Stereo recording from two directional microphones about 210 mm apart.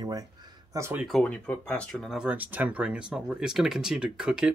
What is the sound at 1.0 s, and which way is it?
Speech, 5° left (ahead or behind).